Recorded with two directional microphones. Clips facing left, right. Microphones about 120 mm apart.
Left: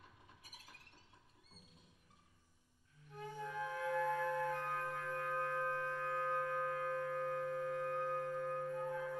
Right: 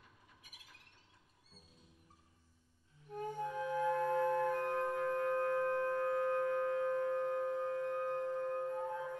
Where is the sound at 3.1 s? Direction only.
45° right (ahead or behind).